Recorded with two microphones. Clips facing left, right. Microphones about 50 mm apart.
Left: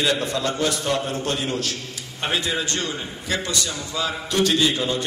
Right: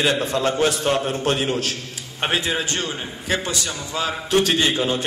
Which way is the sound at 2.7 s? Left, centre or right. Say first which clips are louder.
Right 1 dB; right.